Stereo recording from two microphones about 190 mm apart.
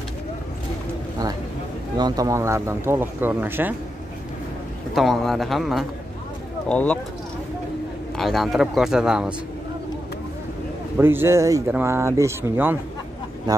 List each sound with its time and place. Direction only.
2.0 s speech: 20° right (ahead or behind)
4.9 s speech: centre (ahead or behind)
8.2 s speech: centre (ahead or behind)
11.0 s speech: 10° right (ahead or behind)